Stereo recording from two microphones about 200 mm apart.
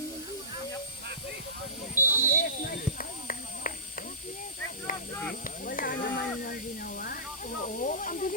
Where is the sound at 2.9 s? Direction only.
45° left (ahead or behind).